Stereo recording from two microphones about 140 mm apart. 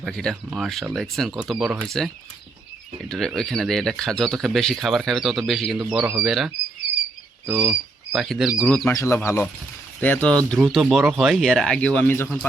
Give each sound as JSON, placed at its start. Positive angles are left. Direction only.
{"t": 0.0, "sound": "speech", "side_deg": 5}
{"t": 5.9, "sound": "speech", "side_deg": -10}
{"t": 7.4, "sound": "speech", "side_deg": -5}
{"t": 8.9, "sound": "speech", "side_deg": 20}